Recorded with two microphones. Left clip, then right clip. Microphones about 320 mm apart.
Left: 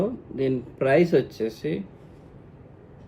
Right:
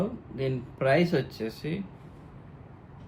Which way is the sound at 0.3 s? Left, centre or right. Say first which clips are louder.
Left 6 dB; centre.